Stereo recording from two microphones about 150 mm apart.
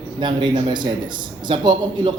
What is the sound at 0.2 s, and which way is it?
A man's voice, 30° right (ahead or behind).